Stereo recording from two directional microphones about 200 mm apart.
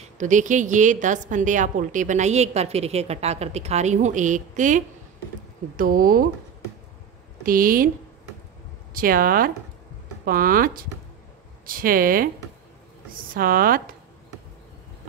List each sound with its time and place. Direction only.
0.0 s a woman's voice: 40° right (ahead or behind)
7.4 s speech: 45° right (ahead or behind)
8.9 s speech: 45° right (ahead or behind)